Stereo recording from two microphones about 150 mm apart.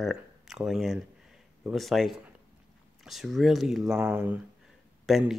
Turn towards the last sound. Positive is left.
turn(degrees=0)  # may be behind; listen again after turning